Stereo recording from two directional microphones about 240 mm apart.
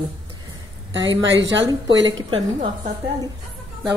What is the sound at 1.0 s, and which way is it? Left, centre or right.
Speech, right.